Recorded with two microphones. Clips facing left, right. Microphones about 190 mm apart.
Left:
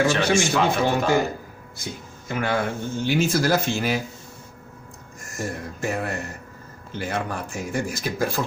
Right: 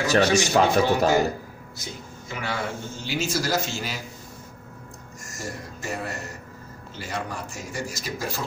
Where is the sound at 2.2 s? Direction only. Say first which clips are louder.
Left 6 dB; 55° left (ahead or behind).